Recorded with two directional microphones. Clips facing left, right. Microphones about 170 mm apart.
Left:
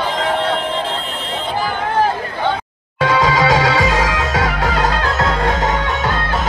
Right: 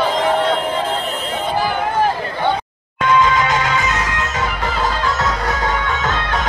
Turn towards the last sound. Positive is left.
turn(degrees=60)  # may be behind; listen again after turning